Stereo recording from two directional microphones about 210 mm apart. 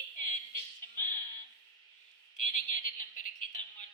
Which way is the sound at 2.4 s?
40° left (ahead or behind).